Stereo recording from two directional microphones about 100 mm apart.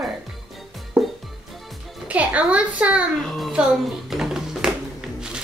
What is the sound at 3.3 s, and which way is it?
Speech, centre (ahead or behind).